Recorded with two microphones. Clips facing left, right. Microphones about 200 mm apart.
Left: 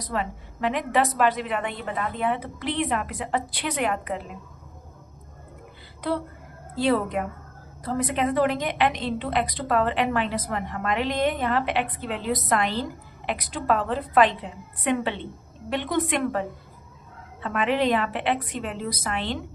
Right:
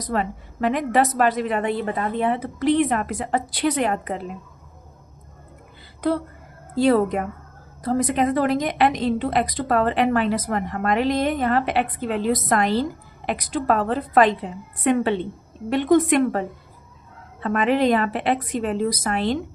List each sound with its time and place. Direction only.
0.1 s a woman's voice: 45° right (ahead or behind)
6.7 s a woman's voice: 45° right (ahead or behind)
17.4 s a woman's voice: 45° right (ahead or behind)